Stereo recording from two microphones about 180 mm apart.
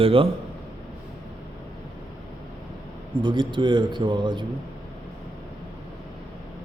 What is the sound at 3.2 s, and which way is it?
A man's voice, 25° right (ahead or behind).